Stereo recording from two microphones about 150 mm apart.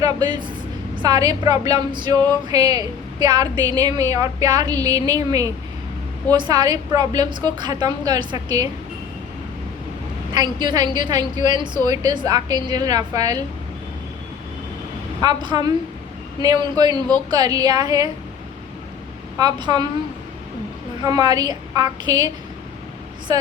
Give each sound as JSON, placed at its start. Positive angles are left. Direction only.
{"t": 0.0, "sound": "speech", "side_deg": -30}
{"t": 10.3, "sound": "speech", "side_deg": -30}
{"t": 15.2, "sound": "speech", "side_deg": -30}
{"t": 19.4, "sound": "speech", "side_deg": -30}
{"t": 21.0, "sound": "speech", "side_deg": -25}